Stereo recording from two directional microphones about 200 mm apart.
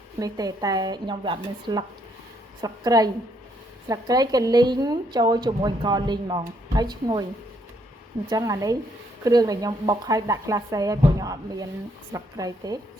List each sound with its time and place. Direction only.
0.2 s a woman's voice: 20° right (ahead or behind)
8.3 s a woman's voice: 15° right (ahead or behind)